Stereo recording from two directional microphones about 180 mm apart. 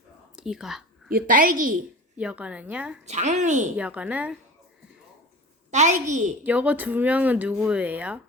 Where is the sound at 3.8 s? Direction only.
10° right (ahead or behind).